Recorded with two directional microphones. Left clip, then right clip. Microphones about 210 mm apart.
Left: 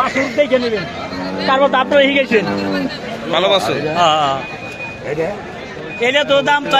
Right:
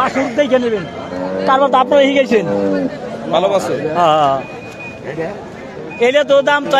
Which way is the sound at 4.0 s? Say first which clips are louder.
Right 2 dB; 35° right (ahead or behind).